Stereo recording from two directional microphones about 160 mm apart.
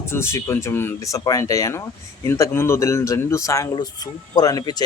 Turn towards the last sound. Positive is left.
turn(degrees=25)  # may be behind; listen again after turning